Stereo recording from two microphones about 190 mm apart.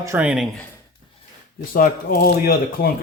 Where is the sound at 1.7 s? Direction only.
50° left (ahead or behind).